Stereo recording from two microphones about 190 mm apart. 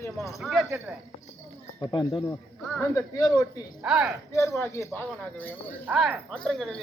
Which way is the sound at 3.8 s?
5° right (ahead or behind).